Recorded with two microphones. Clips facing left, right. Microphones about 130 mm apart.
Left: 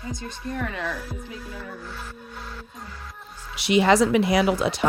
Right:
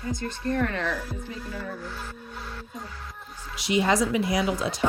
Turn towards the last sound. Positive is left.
turn(degrees=70)  # may be behind; listen again after turning